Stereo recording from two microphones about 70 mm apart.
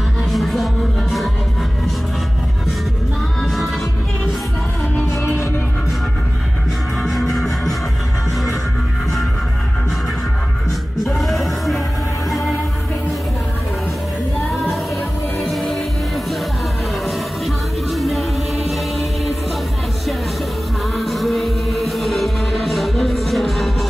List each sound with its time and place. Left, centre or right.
0.3 s music: centre
4.9 s music: left
7.0 s music: centre
11.1 s music: centre
15.4 s music: centre
17.9 s music: centre
21.0 s music: centre